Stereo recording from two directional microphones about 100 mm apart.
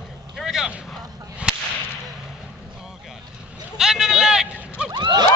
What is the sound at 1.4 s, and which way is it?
Whip, 10° right (ahead or behind).